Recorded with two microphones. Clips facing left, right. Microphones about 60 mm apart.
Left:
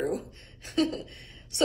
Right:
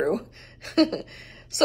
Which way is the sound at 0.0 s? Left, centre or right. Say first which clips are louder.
Right 5 dB; right.